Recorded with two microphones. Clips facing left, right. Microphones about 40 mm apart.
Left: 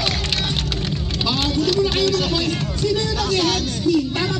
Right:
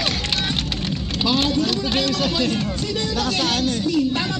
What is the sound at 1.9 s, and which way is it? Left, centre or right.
Speech, right.